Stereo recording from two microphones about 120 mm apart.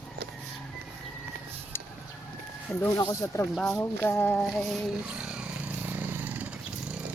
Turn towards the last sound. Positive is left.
turn(degrees=-15)  # may be behind; listen again after turning